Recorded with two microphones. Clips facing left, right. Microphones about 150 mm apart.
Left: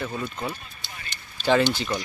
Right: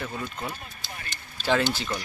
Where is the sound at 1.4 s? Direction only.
Centre (ahead or behind).